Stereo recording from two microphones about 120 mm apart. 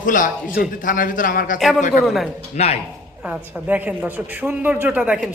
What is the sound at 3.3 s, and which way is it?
A woman's voice, 10° right (ahead or behind).